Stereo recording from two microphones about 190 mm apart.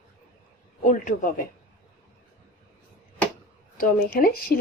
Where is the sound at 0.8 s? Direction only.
45° left (ahead or behind).